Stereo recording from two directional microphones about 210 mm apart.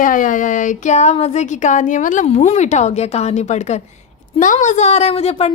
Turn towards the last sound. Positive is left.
turn(degrees=30)  # may be behind; listen again after turning